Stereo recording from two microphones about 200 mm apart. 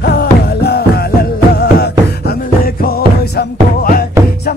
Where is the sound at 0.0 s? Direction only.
55° left (ahead or behind).